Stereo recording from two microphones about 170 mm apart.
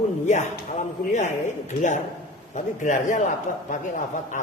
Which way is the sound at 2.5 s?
45° left (ahead or behind).